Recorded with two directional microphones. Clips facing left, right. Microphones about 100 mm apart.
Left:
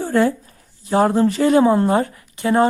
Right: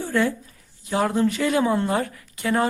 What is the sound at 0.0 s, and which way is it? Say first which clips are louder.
A woman's voice: left 5 dB; 40° left (ahead or behind).